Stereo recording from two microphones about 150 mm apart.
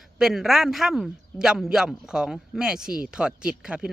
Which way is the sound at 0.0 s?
Centre (ahead or behind).